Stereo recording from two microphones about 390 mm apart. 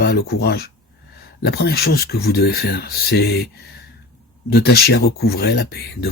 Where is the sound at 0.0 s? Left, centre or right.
Left.